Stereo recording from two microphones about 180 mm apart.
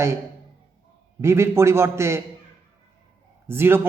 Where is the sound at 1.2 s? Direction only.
15° right (ahead or behind).